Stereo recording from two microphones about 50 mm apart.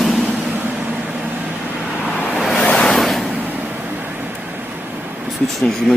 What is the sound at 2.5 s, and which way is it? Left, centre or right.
Vehicle, centre.